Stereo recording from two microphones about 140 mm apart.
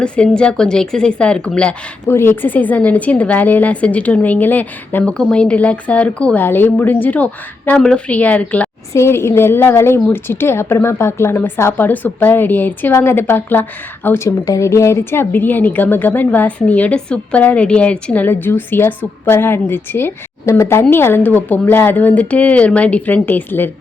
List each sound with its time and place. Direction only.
0.0 s a woman's voice: 5° left (ahead or behind)